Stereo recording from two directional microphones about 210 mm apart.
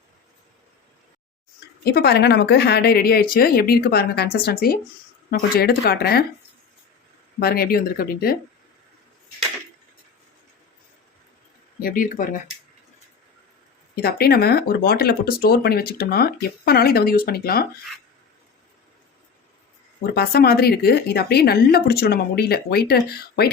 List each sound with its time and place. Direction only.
1.8 s speech: 50° left (ahead or behind)
7.3 s speech: 45° left (ahead or behind)
11.8 s speech: 45° left (ahead or behind)
13.9 s speech: 45° left (ahead or behind)
20.1 s speech: 50° left (ahead or behind)